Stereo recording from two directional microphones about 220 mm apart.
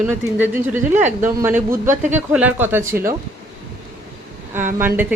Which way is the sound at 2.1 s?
5° right (ahead or behind).